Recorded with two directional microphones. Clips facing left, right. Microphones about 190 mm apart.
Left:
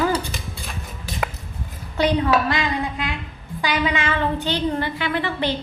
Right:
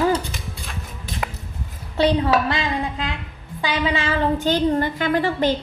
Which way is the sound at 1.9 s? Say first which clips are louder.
Right 1 dB; 30° right (ahead or behind).